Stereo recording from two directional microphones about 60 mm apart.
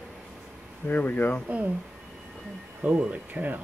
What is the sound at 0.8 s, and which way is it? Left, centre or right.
Speech, left.